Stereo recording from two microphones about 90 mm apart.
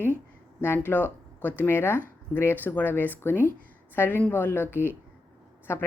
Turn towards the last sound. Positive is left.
turn(degrees=30)  # may be behind; listen again after turning